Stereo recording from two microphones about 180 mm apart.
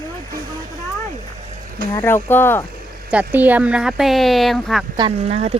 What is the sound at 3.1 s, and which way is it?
Speech, 10° right (ahead or behind).